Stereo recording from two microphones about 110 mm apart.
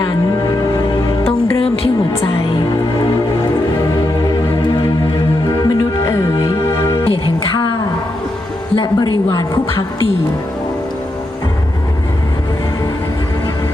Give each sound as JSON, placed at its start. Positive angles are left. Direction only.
{"t": 1.5, "sound": "music", "side_deg": 60}
{"t": 5.5, "sound": "music", "side_deg": 40}
{"t": 6.1, "sound": "music", "side_deg": 25}
{"t": 8.7, "sound": "music", "side_deg": 40}